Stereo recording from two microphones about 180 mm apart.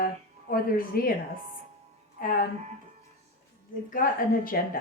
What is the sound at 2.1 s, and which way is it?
Speech, 50° left (ahead or behind).